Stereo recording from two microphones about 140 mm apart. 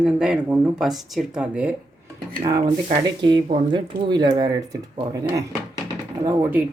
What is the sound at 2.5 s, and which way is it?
Speech, 30° right (ahead or behind).